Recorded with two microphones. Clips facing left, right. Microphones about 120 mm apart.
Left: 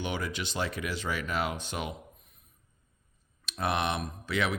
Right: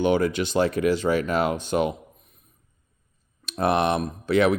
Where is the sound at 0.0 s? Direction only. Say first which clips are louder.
Right 13 dB; 50° right (ahead or behind).